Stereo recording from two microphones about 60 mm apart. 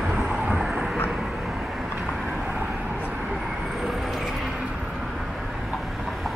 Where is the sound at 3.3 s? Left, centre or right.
Centre.